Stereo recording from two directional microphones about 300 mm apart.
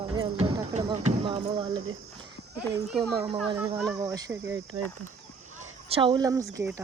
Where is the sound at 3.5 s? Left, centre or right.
Centre.